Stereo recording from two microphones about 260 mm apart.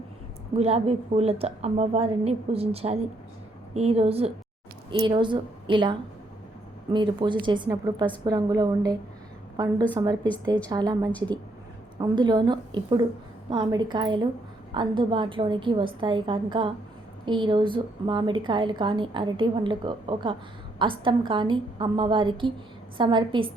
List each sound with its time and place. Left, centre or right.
0.5 s a woman's voice: right